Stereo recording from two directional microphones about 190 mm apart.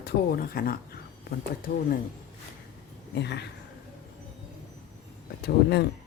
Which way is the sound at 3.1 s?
65° left (ahead or behind).